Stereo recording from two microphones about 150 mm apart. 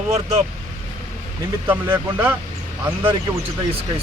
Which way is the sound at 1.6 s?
10° right (ahead or behind).